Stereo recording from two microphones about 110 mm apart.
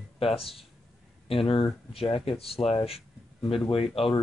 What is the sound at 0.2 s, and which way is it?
Speech, 60° left (ahead or behind).